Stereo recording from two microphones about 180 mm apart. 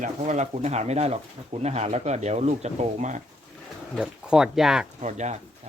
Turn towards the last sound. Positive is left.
turn(degrees=-40)  # may be behind; listen again after turning